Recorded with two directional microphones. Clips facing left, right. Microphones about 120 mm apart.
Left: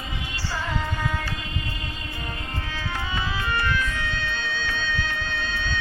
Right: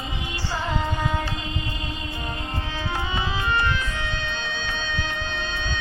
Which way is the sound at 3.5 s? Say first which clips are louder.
Right 1 dB; 20° right (ahead or behind).